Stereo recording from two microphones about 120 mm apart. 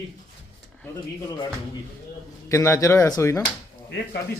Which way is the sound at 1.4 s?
35° left (ahead or behind).